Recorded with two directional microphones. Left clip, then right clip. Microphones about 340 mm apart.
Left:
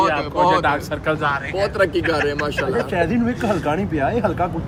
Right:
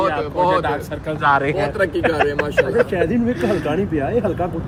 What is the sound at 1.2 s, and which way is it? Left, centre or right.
Speech, centre.